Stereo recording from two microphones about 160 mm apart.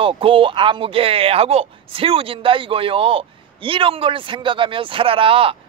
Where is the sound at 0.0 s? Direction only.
35° right (ahead or behind).